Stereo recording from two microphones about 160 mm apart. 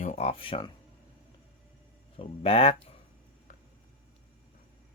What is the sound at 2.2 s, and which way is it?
Speech, 35° left (ahead or behind).